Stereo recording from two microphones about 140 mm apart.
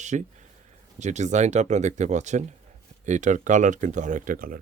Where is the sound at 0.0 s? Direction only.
60° right (ahead or behind); by 4.6 s 90° right.